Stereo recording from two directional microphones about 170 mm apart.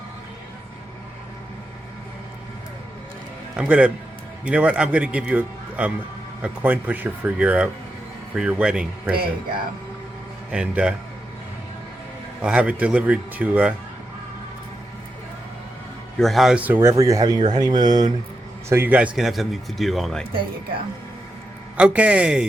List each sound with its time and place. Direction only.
3.5 s a man's voice: 5° right (ahead or behind)
10.5 s speech: 5° right (ahead or behind)
12.4 s a man's voice: 5° right (ahead or behind)
16.1 s speech: centre (ahead or behind); by 18.1 s 25° right (ahead or behind)
18.7 s speech: 10° right (ahead or behind)
21.8 s a man's voice: 5° right (ahead or behind)